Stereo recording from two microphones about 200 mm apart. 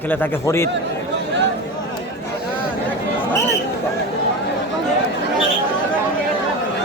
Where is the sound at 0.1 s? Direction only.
10° left (ahead or behind).